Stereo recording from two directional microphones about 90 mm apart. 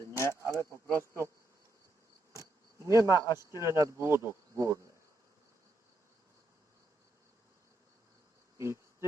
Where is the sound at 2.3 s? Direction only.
35° right (ahead or behind).